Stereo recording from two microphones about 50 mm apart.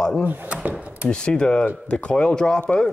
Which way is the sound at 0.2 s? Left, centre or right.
Right.